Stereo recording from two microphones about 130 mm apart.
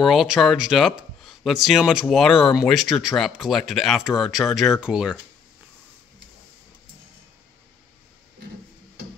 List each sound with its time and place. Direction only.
0.0 s speech: centre (ahead or behind)